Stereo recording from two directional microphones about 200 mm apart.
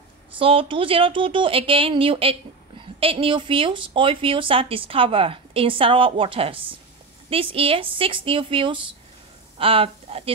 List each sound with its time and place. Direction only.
0.3 s speech: 25° right (ahead or behind)